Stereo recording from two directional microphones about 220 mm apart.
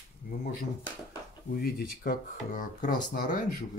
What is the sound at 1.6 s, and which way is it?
Speech, 40° left (ahead or behind).